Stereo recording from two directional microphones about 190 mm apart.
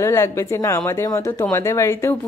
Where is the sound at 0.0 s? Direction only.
15° left (ahead or behind).